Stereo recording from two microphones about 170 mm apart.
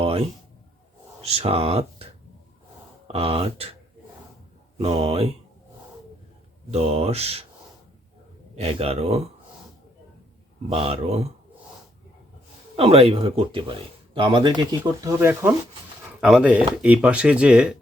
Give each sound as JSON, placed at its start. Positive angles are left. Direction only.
{"t": 0.0, "sound": "a sound", "side_deg": -35}
{"t": 1.2, "sound": "speech", "side_deg": -35}
{"t": 3.1, "sound": "speech", "side_deg": -35}
{"t": 4.8, "sound": "speech", "side_deg": -35}
{"t": 6.7, "sound": "speech", "side_deg": -35}
{"t": 8.5, "sound": "speech", "side_deg": -35}
{"t": 10.7, "sound": "speech", "side_deg": -35}
{"t": 12.7, "sound": "speech", "side_deg": -35}